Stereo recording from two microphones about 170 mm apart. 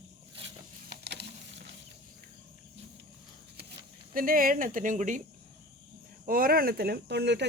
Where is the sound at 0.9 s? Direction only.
75° right (ahead or behind).